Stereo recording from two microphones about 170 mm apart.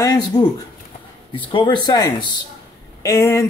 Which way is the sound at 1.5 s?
25° left (ahead or behind).